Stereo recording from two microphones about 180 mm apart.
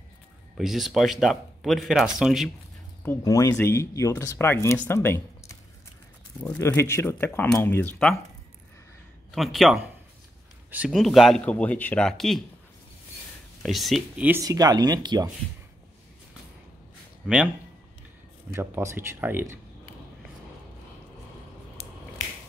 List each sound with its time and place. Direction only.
0.6 s speech: centre (ahead or behind)
3.0 s speech: 15° left (ahead or behind)
6.4 s speech: 10° left (ahead or behind)
9.3 s speech: centre (ahead or behind)
13.6 s speech: centre (ahead or behind)
14.4 s speech: 20° right (ahead or behind)
18.5 s speech: 15° right (ahead or behind)